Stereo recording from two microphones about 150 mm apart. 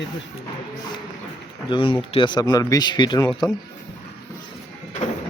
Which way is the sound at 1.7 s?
35° left (ahead or behind).